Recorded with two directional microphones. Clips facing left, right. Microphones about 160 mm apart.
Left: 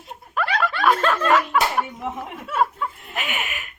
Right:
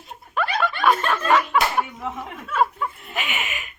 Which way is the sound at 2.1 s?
30° left (ahead or behind).